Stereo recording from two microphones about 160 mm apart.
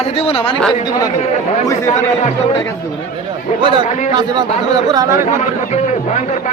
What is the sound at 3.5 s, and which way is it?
Speech, 55° left (ahead or behind).